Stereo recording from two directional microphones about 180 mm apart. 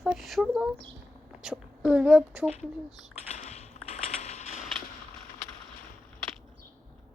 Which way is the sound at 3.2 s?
40° left (ahead or behind).